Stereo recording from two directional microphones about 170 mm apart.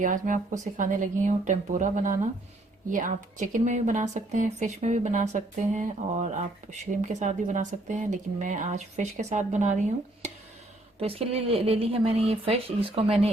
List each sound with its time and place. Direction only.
0.0 s a woman's voice: 50° right (ahead or behind)
11.0 s a woman's voice: 35° right (ahead or behind)